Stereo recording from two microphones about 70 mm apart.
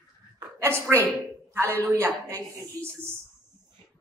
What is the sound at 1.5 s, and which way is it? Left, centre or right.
Speech, right.